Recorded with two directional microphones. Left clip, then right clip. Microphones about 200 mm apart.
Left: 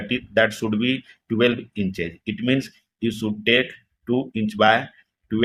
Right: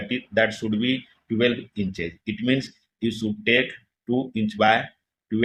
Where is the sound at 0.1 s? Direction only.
20° left (ahead or behind).